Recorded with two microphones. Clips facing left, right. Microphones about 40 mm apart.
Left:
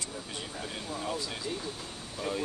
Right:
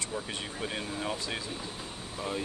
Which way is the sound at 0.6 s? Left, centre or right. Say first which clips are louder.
Right 3 dB; right.